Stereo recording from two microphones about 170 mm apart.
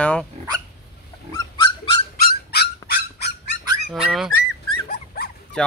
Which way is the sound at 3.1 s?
75° left (ahead or behind).